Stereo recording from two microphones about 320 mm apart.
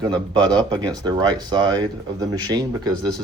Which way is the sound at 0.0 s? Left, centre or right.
Centre.